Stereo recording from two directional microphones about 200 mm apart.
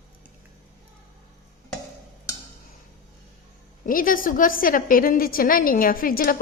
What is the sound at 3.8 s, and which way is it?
A woman's voice, 45° left (ahead or behind).